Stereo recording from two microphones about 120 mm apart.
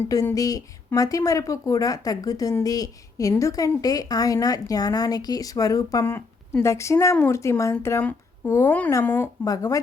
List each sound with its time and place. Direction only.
0.3 s speech: 30° left (ahead or behind)